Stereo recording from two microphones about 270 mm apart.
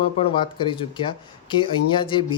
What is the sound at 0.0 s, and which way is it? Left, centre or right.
Speech, centre.